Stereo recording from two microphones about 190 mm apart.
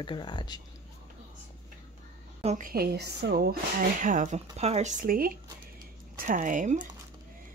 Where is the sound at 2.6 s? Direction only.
55° right (ahead or behind).